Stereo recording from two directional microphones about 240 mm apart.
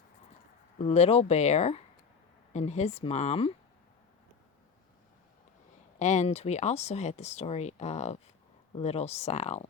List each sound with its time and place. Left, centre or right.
0.8 s speech: left
6.0 s speech: left